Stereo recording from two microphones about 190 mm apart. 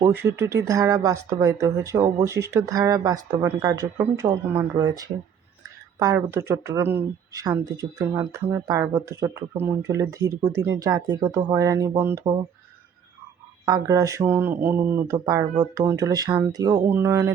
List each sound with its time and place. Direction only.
0.0 s speech: 15° right (ahead or behind)
13.7 s speech: 20° right (ahead or behind)